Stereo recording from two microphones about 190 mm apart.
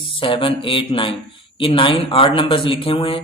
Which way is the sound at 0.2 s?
25° left (ahead or behind).